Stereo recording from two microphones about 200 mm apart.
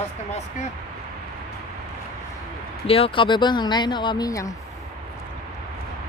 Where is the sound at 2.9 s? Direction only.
30° left (ahead or behind).